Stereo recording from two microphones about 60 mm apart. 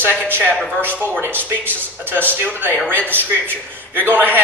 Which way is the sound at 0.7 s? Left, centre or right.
Right.